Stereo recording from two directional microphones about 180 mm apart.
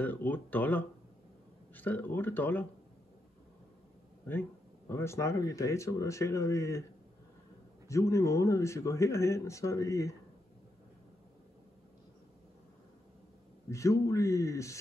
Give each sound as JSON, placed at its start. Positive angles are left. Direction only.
{"t": 0.0, "sound": "speech", "side_deg": 10}
{"t": 4.3, "sound": "speech", "side_deg": 10}
{"t": 7.9, "sound": "speech", "side_deg": 15}
{"t": 13.7, "sound": "speech", "side_deg": 15}